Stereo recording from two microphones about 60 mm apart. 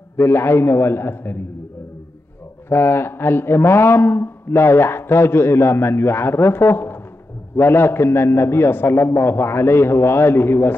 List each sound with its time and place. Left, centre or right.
0.2 s a man's voice: left
2.7 s a man's voice: left